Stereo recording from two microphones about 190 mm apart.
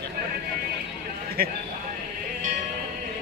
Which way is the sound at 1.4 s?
50° right (ahead or behind).